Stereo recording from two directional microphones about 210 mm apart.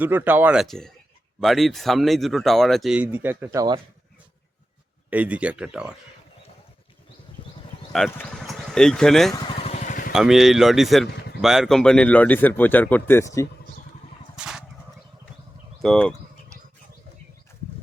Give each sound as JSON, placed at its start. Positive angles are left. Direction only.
{"t": 0.0, "sound": "speech", "side_deg": -10}
{"t": 5.1, "sound": "speech", "side_deg": -5}
{"t": 7.4, "sound": "a sound", "side_deg": 25}
{"t": 7.9, "sound": "speech", "side_deg": 5}
{"t": 9.3, "sound": "vehicle", "side_deg": 30}
{"t": 10.1, "sound": "speech", "side_deg": 0}
{"t": 14.3, "sound": "a sound", "side_deg": -5}
{"t": 15.8, "sound": "speech", "side_deg": 5}